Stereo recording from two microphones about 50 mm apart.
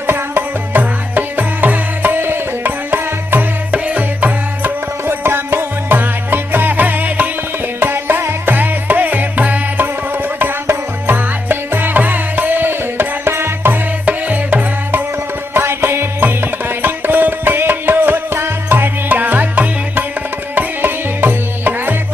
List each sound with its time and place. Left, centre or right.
0.0 s music: right
3.7 s music: right
5.0 s music: right
7.8 s music: right
8.5 s music: right
11.1 s music: right
13.3 s music: right
13.7 s music: right
15.5 s music: right
16.2 s music: right